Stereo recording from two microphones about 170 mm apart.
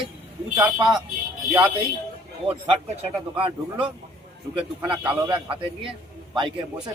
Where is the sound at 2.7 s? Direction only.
30° right (ahead or behind).